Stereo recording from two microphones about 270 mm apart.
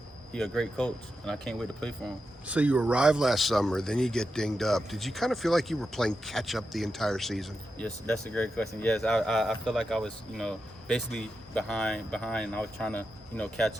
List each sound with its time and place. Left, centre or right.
0.3 s speech: centre